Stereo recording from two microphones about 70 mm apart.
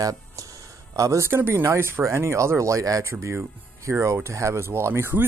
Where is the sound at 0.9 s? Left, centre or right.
Right.